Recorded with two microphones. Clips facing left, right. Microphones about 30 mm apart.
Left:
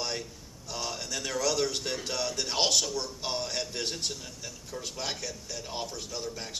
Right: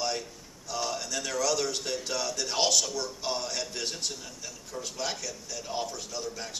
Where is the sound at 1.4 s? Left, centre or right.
Left.